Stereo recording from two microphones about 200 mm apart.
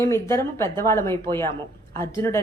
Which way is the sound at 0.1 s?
15° left (ahead or behind).